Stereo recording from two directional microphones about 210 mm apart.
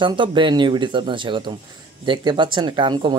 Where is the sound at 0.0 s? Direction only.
25° right (ahead or behind).